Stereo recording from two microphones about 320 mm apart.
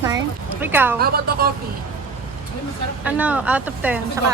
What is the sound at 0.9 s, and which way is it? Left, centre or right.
Speech, right.